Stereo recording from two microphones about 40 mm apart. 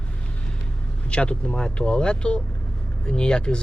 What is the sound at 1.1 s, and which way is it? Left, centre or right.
Speech, left.